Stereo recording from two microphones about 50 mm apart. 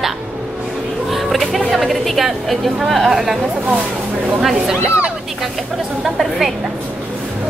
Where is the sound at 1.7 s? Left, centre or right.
Centre.